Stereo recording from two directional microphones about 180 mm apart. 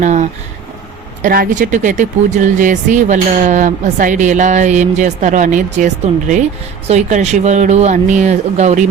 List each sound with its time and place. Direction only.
0.0 s speech: 40° right (ahead or behind)